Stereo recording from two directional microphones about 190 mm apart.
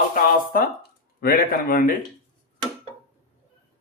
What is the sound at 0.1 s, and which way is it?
Speech, 50° left (ahead or behind).